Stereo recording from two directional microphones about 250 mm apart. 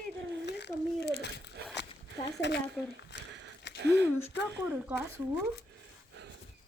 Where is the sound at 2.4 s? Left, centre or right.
Left.